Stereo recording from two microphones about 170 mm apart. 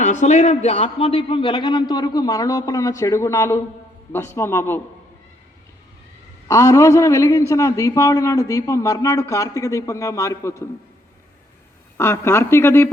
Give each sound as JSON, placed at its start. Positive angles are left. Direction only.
{"t": 0.0, "sound": "a man's voice", "side_deg": 45}
{"t": 6.5, "sound": "a woman's voice", "side_deg": 20}
{"t": 11.9, "sound": "a woman's voice", "side_deg": 15}